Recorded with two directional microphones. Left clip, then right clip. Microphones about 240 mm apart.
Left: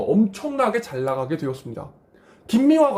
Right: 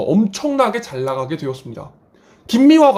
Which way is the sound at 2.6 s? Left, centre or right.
Right.